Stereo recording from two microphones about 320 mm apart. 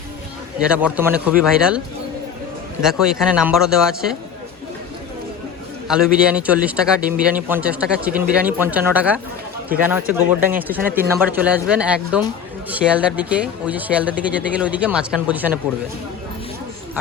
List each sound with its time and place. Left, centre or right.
0.6 s a man's voice: centre
2.8 s a man's voice: centre
5.9 s a man's voice: centre